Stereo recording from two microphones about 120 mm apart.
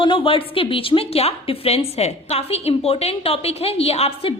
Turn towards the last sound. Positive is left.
turn(degrees=60)  # may be behind; listen again after turning